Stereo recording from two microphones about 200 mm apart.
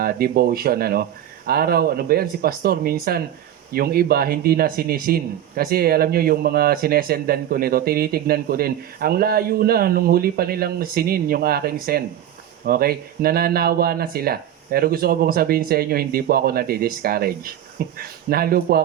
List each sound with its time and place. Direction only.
0.0 s speech: 50° right (ahead or behind)